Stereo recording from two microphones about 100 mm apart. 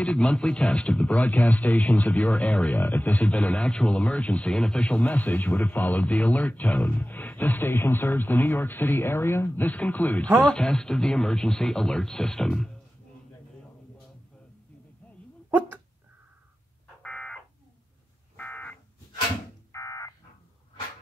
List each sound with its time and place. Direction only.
0.0 s speech: 10° left (ahead or behind)
17.0 s fire alarm: 10° left (ahead or behind)
18.3 s buzzer: 15° left (ahead or behind)
19.7 s a sound: 35° left (ahead or behind)